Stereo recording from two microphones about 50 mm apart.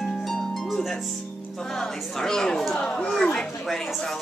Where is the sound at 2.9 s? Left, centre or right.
Left.